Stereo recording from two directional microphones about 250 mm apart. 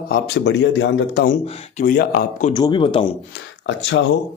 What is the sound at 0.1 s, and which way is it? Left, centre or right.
Speech, left.